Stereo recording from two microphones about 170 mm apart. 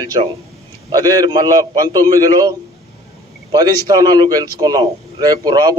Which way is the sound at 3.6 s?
20° right (ahead or behind).